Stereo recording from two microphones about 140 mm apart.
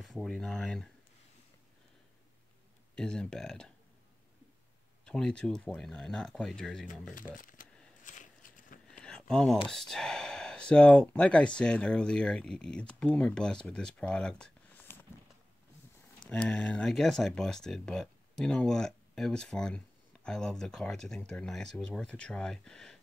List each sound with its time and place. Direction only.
0.0 s speech: centre (ahead or behind)
3.0 s speech: 5° left (ahead or behind)
5.0 s speech: 5° left (ahead or behind)
7.3 s speech: 75° left (ahead or behind)
8.0 s a sound: 65° left (ahead or behind)
8.9 s a sound: 5° left (ahead or behind)
9.7 s speech: 5° left (ahead or behind)
16.3 s speech: 5° left (ahead or behind)